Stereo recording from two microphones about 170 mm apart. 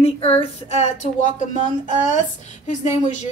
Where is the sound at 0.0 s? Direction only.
35° left (ahead or behind).